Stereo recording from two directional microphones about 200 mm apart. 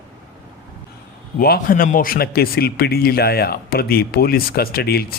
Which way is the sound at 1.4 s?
45° left (ahead or behind).